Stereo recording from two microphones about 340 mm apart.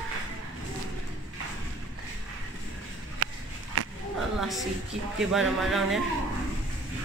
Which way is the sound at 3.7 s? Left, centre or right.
Right.